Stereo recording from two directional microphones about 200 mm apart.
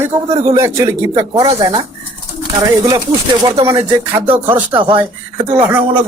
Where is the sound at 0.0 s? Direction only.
15° right (ahead or behind).